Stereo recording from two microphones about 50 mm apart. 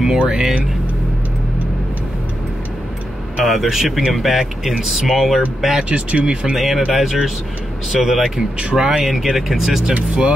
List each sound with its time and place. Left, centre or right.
0.0 s speech: centre
3.4 s speech: centre
5.9 s speech: right
6.5 s speech: centre
9.8 s speech: right